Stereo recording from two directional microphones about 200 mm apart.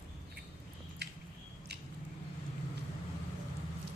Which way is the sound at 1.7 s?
55° right (ahead or behind).